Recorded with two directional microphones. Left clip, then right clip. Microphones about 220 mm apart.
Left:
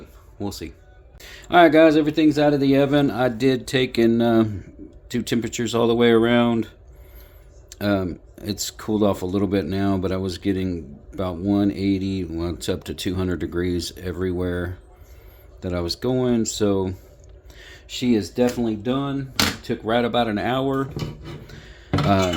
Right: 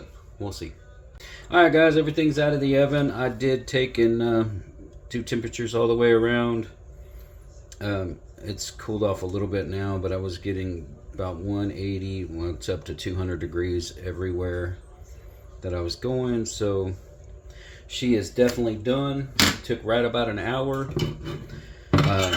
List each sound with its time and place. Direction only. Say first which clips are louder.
0.3 s speech: left 3 dB; 50° left (ahead or behind)
7.7 s speech: left 6 dB; 50° left (ahead or behind)